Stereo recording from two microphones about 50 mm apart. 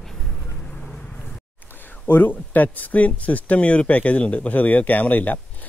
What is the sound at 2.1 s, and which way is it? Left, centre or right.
Speech, left.